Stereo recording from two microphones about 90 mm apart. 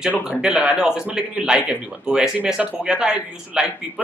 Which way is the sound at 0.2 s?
10° right (ahead or behind).